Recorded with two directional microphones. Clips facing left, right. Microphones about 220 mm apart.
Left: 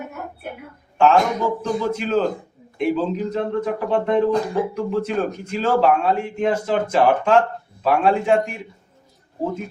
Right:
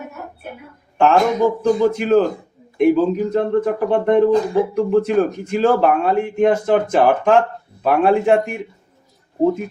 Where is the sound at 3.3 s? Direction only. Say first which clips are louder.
Right 7 dB; 55° right (ahead or behind).